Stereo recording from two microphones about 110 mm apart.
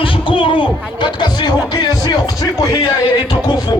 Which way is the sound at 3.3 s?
40° left (ahead or behind).